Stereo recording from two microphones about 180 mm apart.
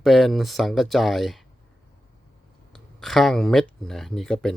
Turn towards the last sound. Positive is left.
turn(degrees=0)  # may be behind; listen again after turning